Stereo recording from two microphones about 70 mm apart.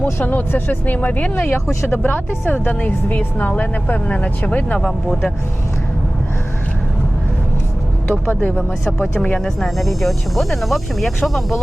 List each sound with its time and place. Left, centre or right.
0.0 s speech: left
4.9 s speech: centre
8.3 s speech: left
9.1 s speech: centre
9.6 s speech: centre